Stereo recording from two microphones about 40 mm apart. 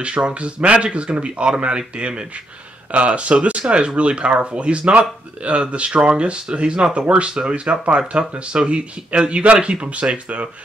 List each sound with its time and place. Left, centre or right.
0.0 s speech: right